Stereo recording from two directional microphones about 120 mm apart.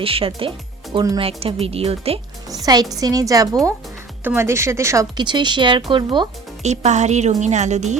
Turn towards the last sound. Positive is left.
turn(degrees=-75)  # may be behind; listen again after turning